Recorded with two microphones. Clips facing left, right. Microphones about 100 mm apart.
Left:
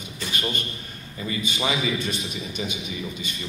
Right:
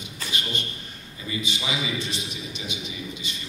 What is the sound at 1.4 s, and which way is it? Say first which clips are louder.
A man's voice: left 5 dB; 45° left (ahead or behind).